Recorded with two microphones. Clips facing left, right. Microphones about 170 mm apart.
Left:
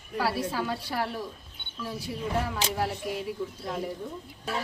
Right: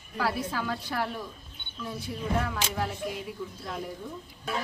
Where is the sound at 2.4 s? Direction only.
30° left (ahead or behind).